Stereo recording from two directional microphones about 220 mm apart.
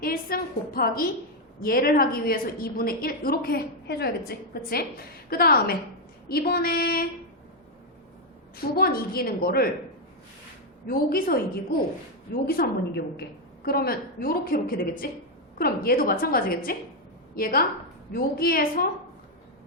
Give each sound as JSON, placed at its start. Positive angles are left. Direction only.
{"t": 0.0, "sound": "a woman's voice", "side_deg": 40}
{"t": 8.5, "sound": "a woman's voice", "side_deg": 45}
{"t": 10.8, "sound": "a woman's voice", "side_deg": 40}